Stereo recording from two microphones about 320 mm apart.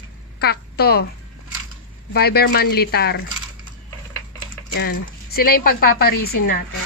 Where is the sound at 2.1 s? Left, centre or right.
Left.